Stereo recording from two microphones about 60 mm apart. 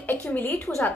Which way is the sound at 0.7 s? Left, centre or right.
Centre.